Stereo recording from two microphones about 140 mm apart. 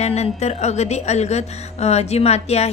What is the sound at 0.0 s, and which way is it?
Speech, 50° left (ahead or behind).